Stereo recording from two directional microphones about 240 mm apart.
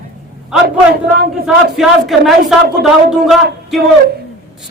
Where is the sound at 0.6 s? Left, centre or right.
Right.